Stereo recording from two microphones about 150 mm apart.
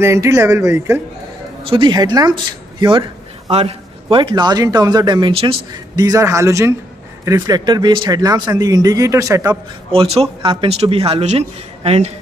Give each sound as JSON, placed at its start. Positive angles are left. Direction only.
{"t": 0.0, "sound": "a man's voice", "side_deg": -20}
{"t": 1.6, "sound": "speech", "side_deg": -35}
{"t": 3.4, "sound": "a man's voice", "side_deg": -45}
{"t": 4.1, "sound": "a man's voice", "side_deg": -30}
{"t": 5.3, "sound": "speech", "side_deg": -40}
{"t": 5.7, "sound": "a man's voice", "side_deg": -25}
{"t": 9.9, "sound": "speech", "side_deg": -40}